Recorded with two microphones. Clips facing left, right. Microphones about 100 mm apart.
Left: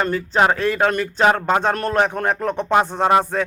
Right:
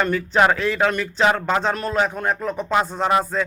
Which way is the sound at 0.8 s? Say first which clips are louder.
Left 2 dB; 45° left (ahead or behind).